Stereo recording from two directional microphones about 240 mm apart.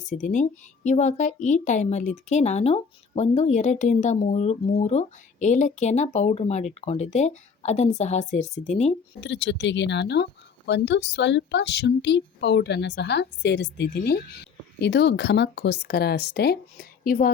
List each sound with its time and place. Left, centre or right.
0.0 s speech: left
9.2 s a woman's voice: left